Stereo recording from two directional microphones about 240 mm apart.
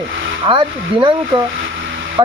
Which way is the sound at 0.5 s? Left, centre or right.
Right.